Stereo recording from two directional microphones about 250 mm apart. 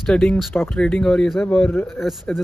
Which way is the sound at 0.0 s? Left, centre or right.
Centre.